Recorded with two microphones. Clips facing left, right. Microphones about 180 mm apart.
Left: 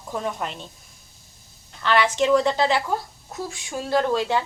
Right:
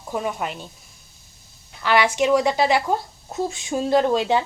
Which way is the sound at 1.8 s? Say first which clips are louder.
Right 1 dB; 15° right (ahead or behind).